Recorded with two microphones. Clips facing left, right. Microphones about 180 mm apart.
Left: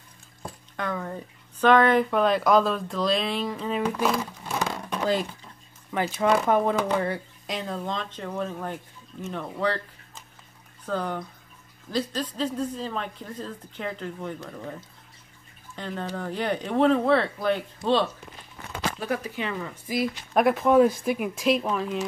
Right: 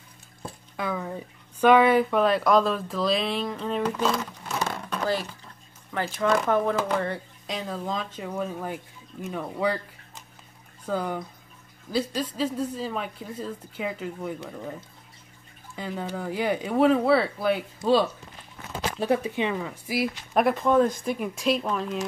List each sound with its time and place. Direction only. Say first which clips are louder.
0.7 s speech: right 1 dB; 5° right (ahead or behind)
18.7 s speech: right 4 dB; 30° right (ahead or behind)
19.5 s speech: right 1 dB; 10° right (ahead or behind)